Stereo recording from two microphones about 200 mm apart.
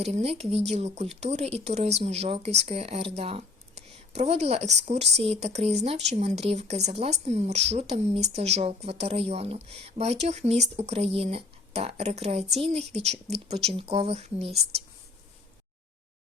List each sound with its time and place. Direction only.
0.0 s speech: 30° right (ahead or behind)